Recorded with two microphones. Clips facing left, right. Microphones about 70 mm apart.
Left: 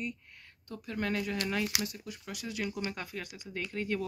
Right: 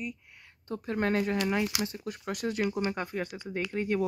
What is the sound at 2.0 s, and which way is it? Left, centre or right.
Speech, right.